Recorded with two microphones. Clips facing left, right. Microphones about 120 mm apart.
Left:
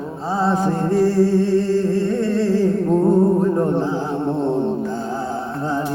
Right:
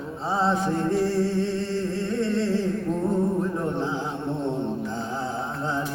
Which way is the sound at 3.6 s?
45° left (ahead or behind).